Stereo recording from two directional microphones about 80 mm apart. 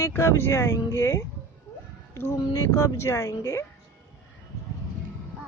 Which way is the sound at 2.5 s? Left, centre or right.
Left.